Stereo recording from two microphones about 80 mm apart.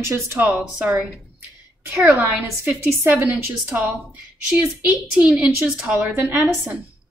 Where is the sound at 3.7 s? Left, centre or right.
Centre.